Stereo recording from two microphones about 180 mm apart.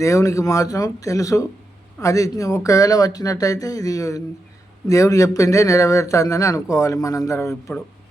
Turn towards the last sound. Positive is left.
turn(degrees=15)  # may be behind; listen again after turning